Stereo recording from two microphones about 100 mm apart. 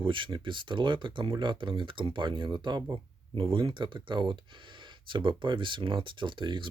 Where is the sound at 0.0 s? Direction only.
55° right (ahead or behind).